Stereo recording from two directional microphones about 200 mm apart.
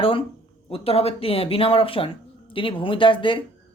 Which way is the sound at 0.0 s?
25° left (ahead or behind).